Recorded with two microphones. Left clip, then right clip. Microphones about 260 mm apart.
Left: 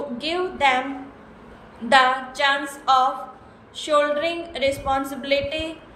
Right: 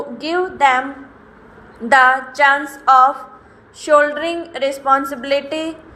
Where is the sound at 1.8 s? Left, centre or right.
Centre.